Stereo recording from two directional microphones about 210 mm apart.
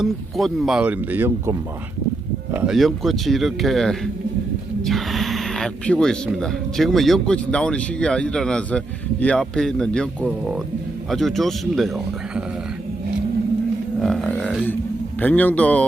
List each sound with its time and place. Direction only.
0.0 s speech: centre (ahead or behind)
14.0 s a man's voice: centre (ahead or behind)